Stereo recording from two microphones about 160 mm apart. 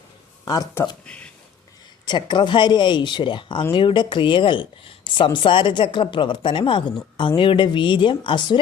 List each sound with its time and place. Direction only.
0.4 s speech: 20° left (ahead or behind)
1.0 s speech: 5° left (ahead or behind)
2.0 s speech: 25° left (ahead or behind)